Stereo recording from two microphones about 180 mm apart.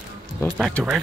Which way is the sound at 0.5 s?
Centre (ahead or behind).